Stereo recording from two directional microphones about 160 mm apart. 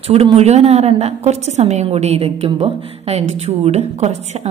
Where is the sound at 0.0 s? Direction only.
40° right (ahead or behind).